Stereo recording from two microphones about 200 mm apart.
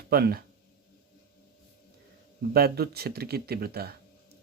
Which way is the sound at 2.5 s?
50° right (ahead or behind).